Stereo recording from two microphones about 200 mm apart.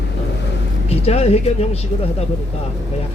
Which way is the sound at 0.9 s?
30° left (ahead or behind).